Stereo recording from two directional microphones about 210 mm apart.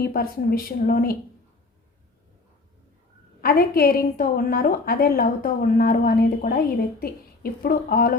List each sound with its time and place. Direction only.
0.0 s a woman's voice: 45° left (ahead or behind)
3.4 s a woman's voice: 45° left (ahead or behind)